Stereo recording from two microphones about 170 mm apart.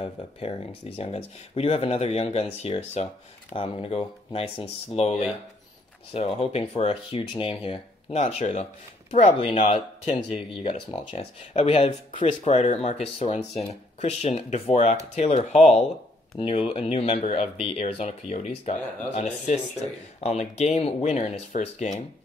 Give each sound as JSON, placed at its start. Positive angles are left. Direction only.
{"t": 0.0, "sound": "speech", "side_deg": 35}
{"t": 6.1, "sound": "speech", "side_deg": 35}
{"t": 20.2, "sound": "speech", "side_deg": 40}